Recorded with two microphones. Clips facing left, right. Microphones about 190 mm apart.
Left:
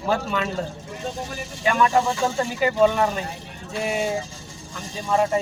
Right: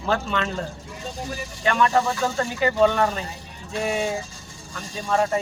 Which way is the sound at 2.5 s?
5° left (ahead or behind).